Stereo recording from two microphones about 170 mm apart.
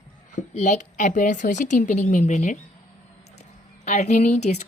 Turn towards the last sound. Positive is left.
turn(degrees=40)  # may be behind; listen again after turning